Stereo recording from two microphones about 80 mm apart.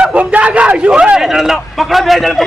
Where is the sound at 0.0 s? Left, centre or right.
Centre.